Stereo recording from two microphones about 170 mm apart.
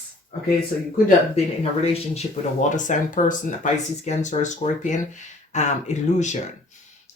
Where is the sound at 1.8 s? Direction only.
40° left (ahead or behind).